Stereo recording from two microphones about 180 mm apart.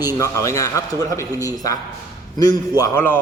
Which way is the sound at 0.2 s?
15° left (ahead or behind).